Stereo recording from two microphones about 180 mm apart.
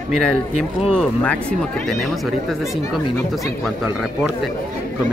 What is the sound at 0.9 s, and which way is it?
Speech, 5° left (ahead or behind).